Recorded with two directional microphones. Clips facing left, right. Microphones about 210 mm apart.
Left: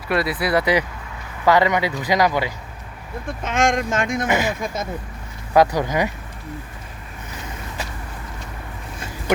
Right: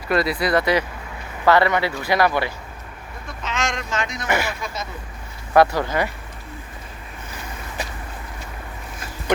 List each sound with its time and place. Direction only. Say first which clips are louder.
0.1 s speech: right 1 dB; 5° left (ahead or behind)
3.4 s speech: left 7 dB; 50° left (ahead or behind)
4.3 s speech: even; 15° left (ahead or behind)
4.6 s speech: left 4 dB; 50° left (ahead or behind)
5.5 s speech: even; 15° left (ahead or behind)